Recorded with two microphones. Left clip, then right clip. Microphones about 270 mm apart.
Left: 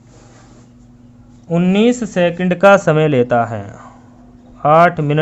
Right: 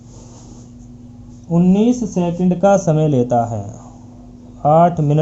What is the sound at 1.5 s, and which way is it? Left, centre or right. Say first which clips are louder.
Speech: left 2 dB; left.